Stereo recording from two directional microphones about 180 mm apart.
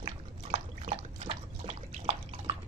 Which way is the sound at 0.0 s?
35° right (ahead or behind).